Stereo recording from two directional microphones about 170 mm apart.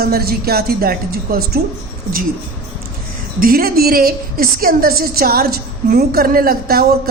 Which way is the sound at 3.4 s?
60° right (ahead or behind).